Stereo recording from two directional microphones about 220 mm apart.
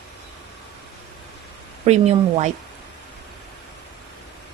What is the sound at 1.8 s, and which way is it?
Speech, 30° right (ahead or behind).